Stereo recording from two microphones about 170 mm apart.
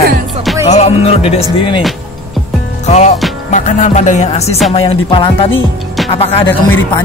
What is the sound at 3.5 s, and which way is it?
Music, 45° left (ahead or behind).